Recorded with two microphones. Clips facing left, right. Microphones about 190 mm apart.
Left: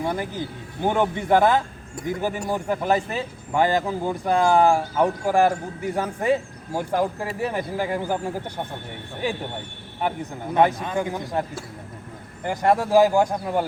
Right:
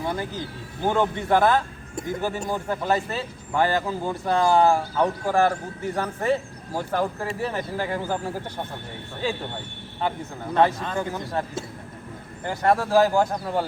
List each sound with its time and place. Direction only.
0.8 s speech: 15° left (ahead or behind)
10.5 s speech: 15° left (ahead or behind)
12.5 s speech: 15° left (ahead or behind)